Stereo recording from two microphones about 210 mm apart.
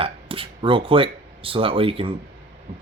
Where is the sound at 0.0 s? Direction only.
25° right (ahead or behind).